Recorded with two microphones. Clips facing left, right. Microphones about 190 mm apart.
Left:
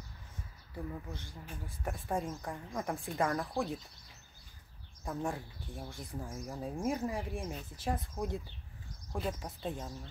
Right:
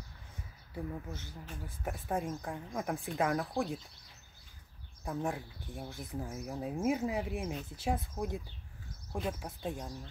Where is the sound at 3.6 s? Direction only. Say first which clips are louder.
Left 1 dB; 15° right (ahead or behind).